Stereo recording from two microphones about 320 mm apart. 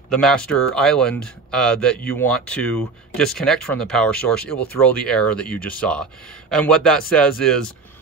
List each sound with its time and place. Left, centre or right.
0.1 s speech: centre